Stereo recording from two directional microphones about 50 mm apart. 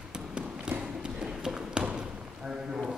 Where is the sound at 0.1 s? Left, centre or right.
Centre.